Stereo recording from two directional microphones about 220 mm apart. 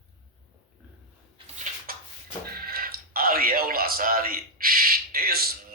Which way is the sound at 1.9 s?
40° right (ahead or behind).